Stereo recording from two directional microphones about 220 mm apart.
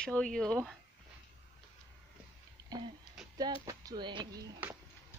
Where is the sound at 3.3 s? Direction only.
15° right (ahead or behind).